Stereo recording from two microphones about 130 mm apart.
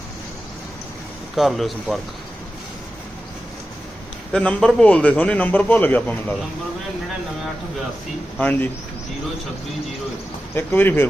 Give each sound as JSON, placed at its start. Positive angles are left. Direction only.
{"t": 1.4, "sound": "speech", "side_deg": 0}
{"t": 4.3, "sound": "a man's voice", "side_deg": 5}
{"t": 8.4, "sound": "a man's voice", "side_deg": 15}
{"t": 10.5, "sound": "a man's voice", "side_deg": 15}